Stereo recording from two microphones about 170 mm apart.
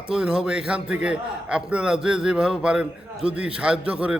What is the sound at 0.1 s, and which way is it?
A man's voice, 5° right (ahead or behind).